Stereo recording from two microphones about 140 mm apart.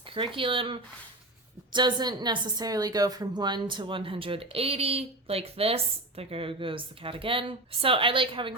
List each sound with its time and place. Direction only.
0.1 s a woman's voice: 40° right (ahead or behind)